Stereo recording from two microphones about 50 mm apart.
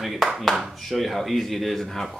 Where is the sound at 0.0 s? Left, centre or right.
Centre.